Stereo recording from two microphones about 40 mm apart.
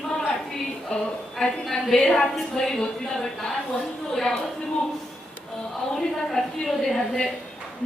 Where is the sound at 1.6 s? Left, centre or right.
Centre.